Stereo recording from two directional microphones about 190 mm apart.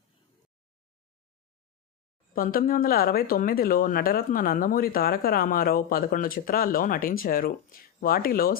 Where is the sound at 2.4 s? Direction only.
50° left (ahead or behind).